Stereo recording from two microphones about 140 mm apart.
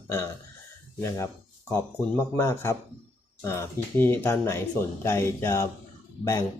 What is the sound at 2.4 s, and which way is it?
Speech, 20° left (ahead or behind).